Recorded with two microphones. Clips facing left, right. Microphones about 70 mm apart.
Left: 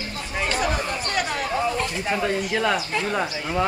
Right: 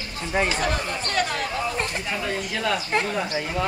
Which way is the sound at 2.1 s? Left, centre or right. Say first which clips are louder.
Left 4 dB; left.